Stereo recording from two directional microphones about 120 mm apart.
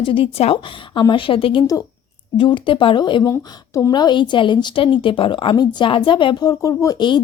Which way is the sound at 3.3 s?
25° left (ahead or behind).